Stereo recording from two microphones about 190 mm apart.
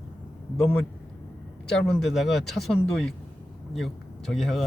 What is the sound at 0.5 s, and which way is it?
Speech, centre (ahead or behind).